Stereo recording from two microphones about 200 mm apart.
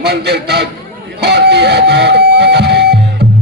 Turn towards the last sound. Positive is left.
turn(degrees=-55)  # may be behind; listen again after turning